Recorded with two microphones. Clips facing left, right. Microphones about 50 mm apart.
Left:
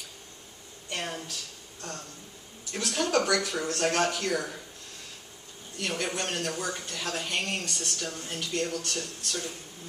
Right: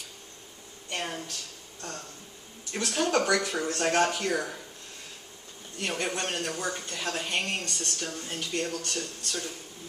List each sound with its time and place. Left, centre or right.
0.8 s a sound: centre
2.7 s speech: centre
5.8 s a man's voice: centre
6.0 s speech: centre
8.4 s speech: centre